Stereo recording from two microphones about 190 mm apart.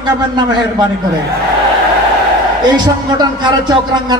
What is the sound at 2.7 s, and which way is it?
A man's voice, 20° right (ahead or behind).